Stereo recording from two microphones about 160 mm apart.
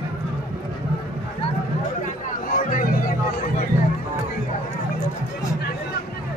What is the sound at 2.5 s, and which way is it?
Music, 55° left (ahead or behind).